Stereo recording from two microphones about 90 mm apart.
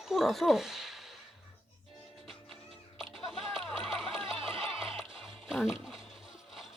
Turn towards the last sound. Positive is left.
turn(degrees=-5)  # may be behind; listen again after turning